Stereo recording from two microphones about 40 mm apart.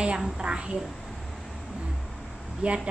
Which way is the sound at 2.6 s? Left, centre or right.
Right.